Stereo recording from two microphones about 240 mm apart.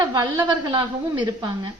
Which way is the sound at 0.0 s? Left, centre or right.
Centre.